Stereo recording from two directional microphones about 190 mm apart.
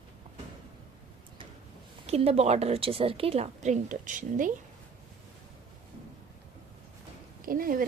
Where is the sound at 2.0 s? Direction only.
35° right (ahead or behind).